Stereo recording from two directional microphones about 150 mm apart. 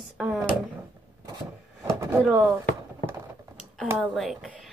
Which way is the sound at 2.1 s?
5° right (ahead or behind).